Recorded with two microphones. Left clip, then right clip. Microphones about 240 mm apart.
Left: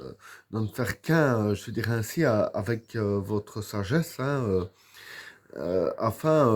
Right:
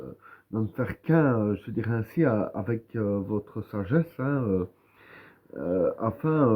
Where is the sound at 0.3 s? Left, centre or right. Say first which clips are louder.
Right 2 dB; left.